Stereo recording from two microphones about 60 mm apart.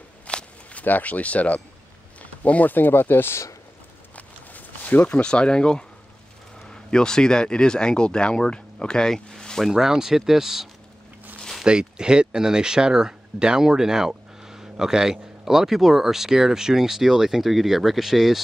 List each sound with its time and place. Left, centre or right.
0.3 s walk: centre
0.8 s speech: left
4.1 s a sound: left
5.2 s speech: centre
9.7 s speech: centre